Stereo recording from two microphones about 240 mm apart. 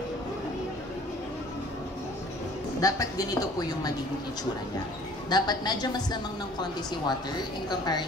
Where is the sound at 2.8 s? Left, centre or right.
Centre.